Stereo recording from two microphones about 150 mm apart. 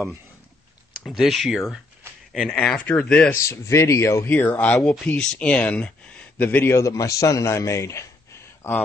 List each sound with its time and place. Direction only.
1.0 s speech: centre (ahead or behind)
3.4 s speech: 20° left (ahead or behind)